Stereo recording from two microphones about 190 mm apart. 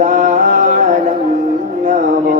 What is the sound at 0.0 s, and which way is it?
Music, 40° right (ahead or behind).